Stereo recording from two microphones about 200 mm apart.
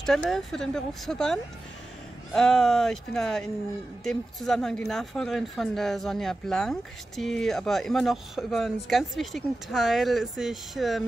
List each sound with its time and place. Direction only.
0.0 s speech: centre (ahead or behind)